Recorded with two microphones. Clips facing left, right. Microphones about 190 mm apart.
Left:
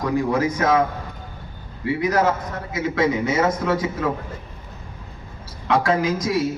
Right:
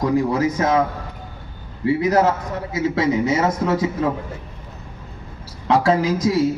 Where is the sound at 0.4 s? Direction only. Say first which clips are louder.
Right 1 dB; 30° right (ahead or behind).